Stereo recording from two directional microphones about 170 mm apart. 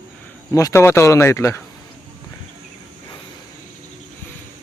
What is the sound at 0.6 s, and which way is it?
Speech, 15° left (ahead or behind).